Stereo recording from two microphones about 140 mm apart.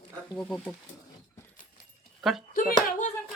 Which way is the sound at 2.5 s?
60° left (ahead or behind).